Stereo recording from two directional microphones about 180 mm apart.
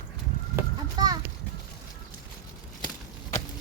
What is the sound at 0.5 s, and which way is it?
Children playing, 20° right (ahead or behind).